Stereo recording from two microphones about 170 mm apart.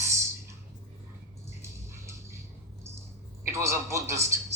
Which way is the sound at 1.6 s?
15° right (ahead or behind).